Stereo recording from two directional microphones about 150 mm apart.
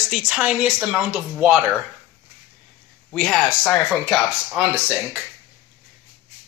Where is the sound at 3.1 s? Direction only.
Centre (ahead or behind).